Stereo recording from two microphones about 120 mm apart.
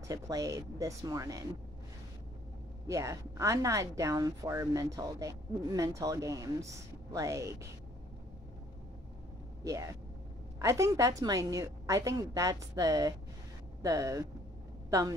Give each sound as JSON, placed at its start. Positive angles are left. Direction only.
{"t": 0.1, "sound": "a woman's voice", "side_deg": -30}
{"t": 2.9, "sound": "a woman's voice", "side_deg": -25}
{"t": 9.7, "sound": "a woman's voice", "side_deg": -30}